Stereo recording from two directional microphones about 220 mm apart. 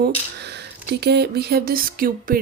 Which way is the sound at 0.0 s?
50° right (ahead or behind).